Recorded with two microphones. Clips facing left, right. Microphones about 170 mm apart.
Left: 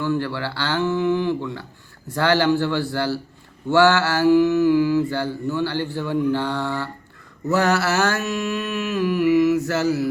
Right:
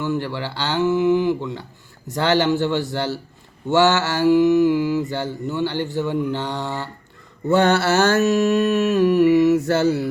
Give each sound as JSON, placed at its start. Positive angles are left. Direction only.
{"t": 0.0, "sound": "speech", "side_deg": -20}
{"t": 2.0, "sound": "mantra", "side_deg": -20}